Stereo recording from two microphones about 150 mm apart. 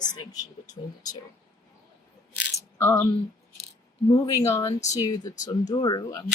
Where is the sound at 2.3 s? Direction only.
15° left (ahead or behind).